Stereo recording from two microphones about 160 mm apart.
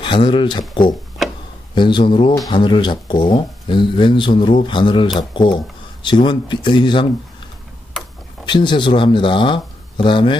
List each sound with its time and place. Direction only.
0.0 s speech: 30° left (ahead or behind)
8.5 s speech: 30° left (ahead or behind)